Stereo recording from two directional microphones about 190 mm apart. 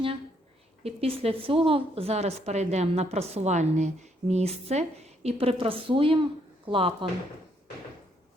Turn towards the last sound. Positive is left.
turn(degrees=-25)  # may be behind; listen again after turning